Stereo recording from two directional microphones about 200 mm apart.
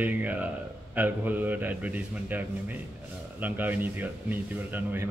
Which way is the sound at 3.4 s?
10° right (ahead or behind).